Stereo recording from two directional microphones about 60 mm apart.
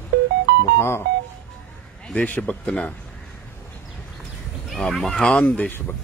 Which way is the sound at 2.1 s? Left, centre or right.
Left.